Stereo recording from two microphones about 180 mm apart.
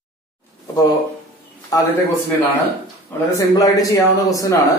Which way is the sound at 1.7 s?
20° left (ahead or behind).